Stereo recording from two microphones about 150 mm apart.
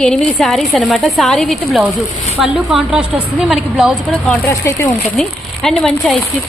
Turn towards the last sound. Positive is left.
turn(degrees=0)  # may be behind; listen again after turning